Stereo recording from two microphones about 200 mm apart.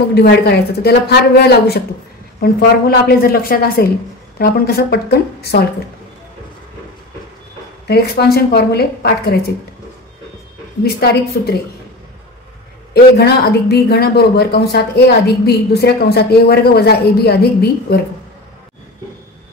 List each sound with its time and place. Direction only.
0.1 s speech: 55° left (ahead or behind)
3.1 s speech: 50° left (ahead or behind)
7.8 s speech: 50° left (ahead or behind)
10.8 s speech: 50° left (ahead or behind)
12.9 s speech: 55° left (ahead or behind)